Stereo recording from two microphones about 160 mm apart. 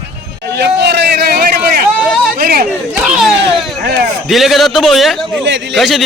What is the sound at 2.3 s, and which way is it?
Speech, 70° right (ahead or behind).